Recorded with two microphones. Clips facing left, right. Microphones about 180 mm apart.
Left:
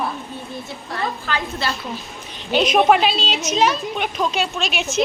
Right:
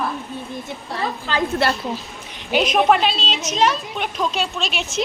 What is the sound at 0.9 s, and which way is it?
Speech, 30° right (ahead or behind).